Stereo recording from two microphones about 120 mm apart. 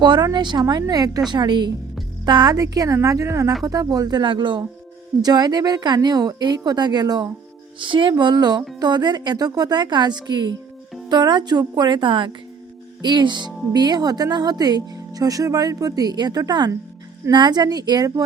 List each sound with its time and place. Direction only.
0.0 s speech: 35° right (ahead or behind)